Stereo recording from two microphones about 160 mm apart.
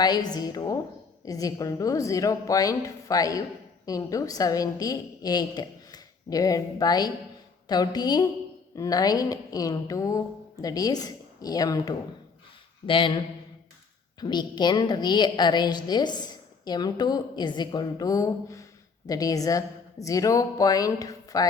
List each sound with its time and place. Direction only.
0.0 s a woman's voice: 25° left (ahead or behind)
14.2 s a woman's voice: 25° left (ahead or behind)